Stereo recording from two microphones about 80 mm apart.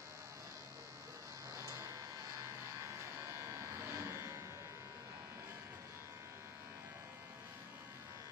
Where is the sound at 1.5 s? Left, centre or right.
Right.